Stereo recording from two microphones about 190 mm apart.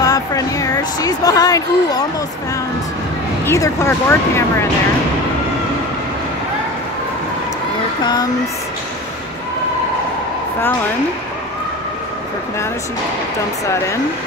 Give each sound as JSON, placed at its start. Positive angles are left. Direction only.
{"t": 0.0, "sound": "speech", "side_deg": 20}
{"t": 3.4, "sound": "speech", "side_deg": 15}
{"t": 8.0, "sound": "speech", "side_deg": 20}